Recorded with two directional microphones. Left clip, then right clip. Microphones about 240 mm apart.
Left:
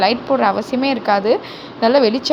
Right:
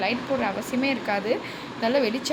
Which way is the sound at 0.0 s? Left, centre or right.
Left.